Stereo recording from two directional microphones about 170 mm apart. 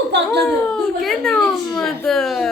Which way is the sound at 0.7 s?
Centre (ahead or behind).